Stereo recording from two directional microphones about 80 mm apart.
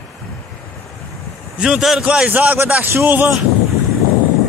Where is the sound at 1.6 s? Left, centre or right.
Centre.